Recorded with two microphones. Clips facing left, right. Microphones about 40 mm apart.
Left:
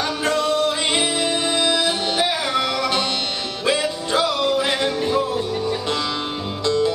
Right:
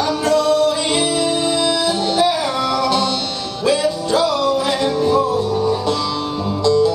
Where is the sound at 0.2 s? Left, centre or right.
Left.